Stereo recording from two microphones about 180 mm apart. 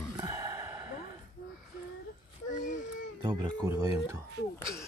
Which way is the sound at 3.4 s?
20° right (ahead or behind).